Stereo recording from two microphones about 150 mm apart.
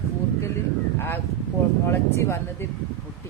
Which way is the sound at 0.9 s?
15° left (ahead or behind).